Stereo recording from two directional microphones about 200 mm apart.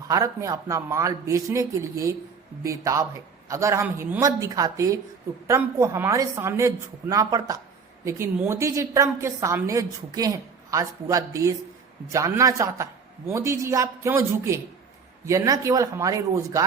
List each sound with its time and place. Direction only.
0.1 s a woman's voice: 15° right (ahead or behind)